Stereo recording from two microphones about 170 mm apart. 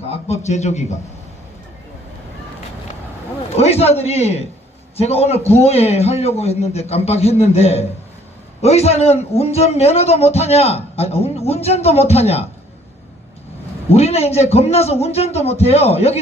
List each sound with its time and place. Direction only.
0.1 s a man's voice: 40° left (ahead or behind)
3.5 s a man's voice: 35° left (ahead or behind)
13.8 s a man's voice: 35° left (ahead or behind)